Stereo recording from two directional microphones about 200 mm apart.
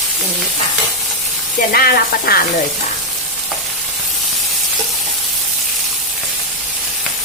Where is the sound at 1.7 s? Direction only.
45° left (ahead or behind).